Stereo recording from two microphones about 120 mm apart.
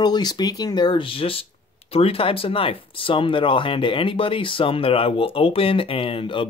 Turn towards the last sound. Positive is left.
turn(degrees=45)  # may be behind; listen again after turning